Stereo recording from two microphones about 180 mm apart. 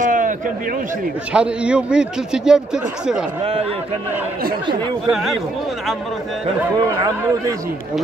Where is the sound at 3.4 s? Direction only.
35° right (ahead or behind).